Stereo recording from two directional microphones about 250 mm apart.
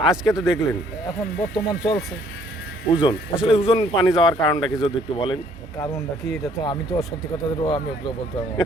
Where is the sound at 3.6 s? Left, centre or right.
Left.